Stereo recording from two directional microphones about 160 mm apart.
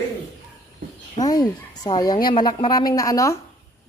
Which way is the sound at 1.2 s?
25° left (ahead or behind).